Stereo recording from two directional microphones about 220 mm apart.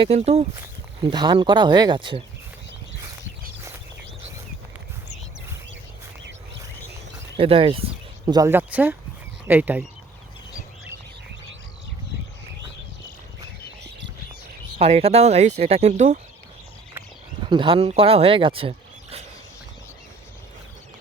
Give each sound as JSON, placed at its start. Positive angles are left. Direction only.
{"t": 0.0, "sound": "speech", "side_deg": -25}
{"t": 7.3, "sound": "speech", "side_deg": -25}
{"t": 8.3, "sound": "speech", "side_deg": -15}
{"t": 14.8, "sound": "speech", "side_deg": -25}
{"t": 17.5, "sound": "speech", "side_deg": -25}